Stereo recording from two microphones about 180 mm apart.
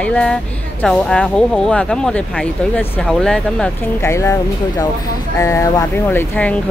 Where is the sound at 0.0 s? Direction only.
5° left (ahead or behind).